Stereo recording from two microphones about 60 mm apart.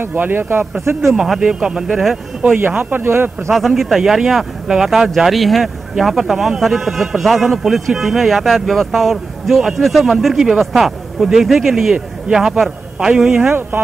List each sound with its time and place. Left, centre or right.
0.0 s speech: right
1.1 s speech: centre
2.5 s speech: right
3.5 s speech: centre
13.5 s speech: right